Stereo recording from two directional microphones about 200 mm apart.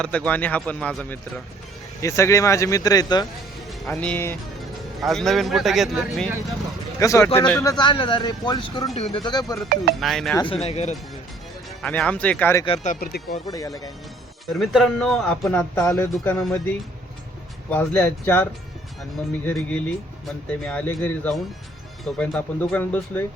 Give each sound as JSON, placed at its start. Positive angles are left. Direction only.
{"t": 0.0, "sound": "speech", "side_deg": 5}
{"t": 3.8, "sound": "a man's voice", "side_deg": 10}
{"t": 7.0, "sound": "speech", "side_deg": 15}
{"t": 7.7, "sound": "speech", "side_deg": 25}
{"t": 9.9, "sound": "a man's voice", "side_deg": 0}
{"t": 10.3, "sound": "speech", "side_deg": 25}
{"t": 11.8, "sound": "speech", "side_deg": 5}
{"t": 12.6, "sound": "speech", "side_deg": 30}
{"t": 12.9, "sound": "speech", "side_deg": 50}
{"t": 13.5, "sound": "speech", "side_deg": 15}
{"t": 14.4, "sound": "a man's voice", "side_deg": 0}
{"t": 15.4, "sound": "speech", "side_deg": 10}
{"t": 19.5, "sound": "speech", "side_deg": 5}